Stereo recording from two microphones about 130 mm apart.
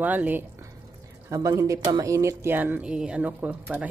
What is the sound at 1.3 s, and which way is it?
Speech, 25° right (ahead or behind).